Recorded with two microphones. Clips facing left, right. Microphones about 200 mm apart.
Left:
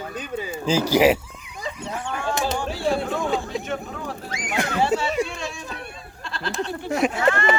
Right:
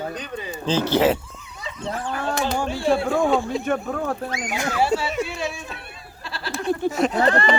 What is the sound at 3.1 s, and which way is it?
Speech, 55° right (ahead or behind).